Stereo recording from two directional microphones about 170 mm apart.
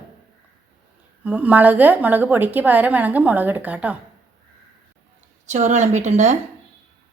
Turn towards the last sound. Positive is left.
turn(degrees=-45)  # may be behind; listen again after turning